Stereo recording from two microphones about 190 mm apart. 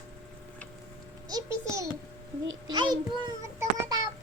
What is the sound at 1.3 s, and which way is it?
A child's voice, 20° right (ahead or behind).